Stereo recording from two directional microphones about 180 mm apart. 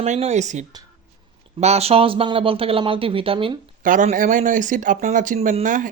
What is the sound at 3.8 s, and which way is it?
Speech, 45° right (ahead or behind).